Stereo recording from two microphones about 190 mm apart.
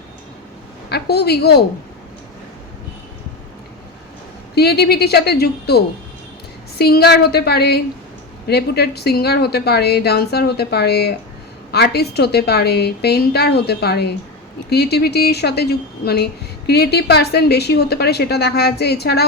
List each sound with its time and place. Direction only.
0.9 s a woman's voice: 55° left (ahead or behind)
4.5 s a woman's voice: 55° left (ahead or behind)